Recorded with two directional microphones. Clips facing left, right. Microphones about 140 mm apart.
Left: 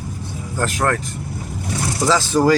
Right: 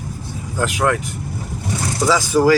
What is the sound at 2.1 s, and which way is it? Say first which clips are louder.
Speech: right 1 dB; 10° right (ahead or behind).